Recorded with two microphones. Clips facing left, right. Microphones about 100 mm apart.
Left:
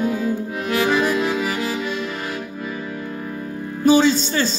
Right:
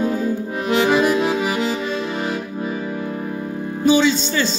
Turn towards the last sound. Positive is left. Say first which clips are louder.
# even
turn(degrees=40)  # may be behind; listen again after turning